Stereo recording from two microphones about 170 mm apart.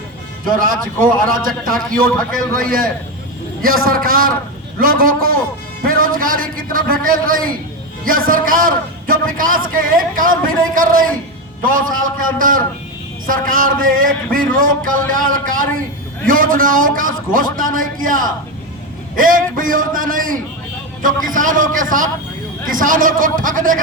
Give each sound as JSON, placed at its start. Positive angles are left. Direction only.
{"t": 0.4, "sound": "a man's voice", "side_deg": -55}